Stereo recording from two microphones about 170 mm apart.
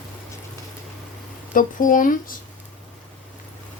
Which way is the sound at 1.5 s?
50° left (ahead or behind).